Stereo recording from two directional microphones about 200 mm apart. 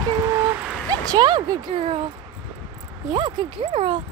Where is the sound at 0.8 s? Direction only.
20° right (ahead or behind).